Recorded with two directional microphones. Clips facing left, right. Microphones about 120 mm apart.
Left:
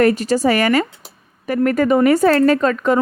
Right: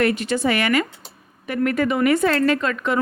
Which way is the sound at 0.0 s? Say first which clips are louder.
Left 5 dB; 40° left (ahead or behind).